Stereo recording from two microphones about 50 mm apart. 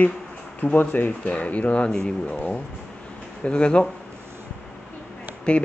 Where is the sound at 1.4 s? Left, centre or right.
Left.